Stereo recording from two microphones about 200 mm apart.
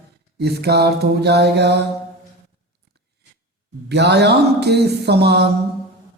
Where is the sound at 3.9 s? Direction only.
55° right (ahead or behind).